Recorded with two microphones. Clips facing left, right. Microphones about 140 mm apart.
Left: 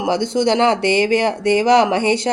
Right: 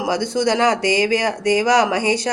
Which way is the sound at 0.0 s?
25° left (ahead or behind).